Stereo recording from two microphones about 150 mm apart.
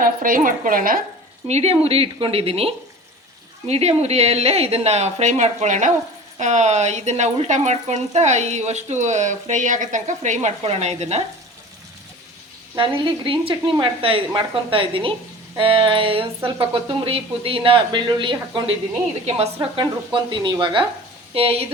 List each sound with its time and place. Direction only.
0.0 s a woman's voice: 70° right (ahead or behind)
1.5 s speech: 45° right (ahead or behind)
12.7 s speech: 35° right (ahead or behind)
20.1 s speech: 30° right (ahead or behind)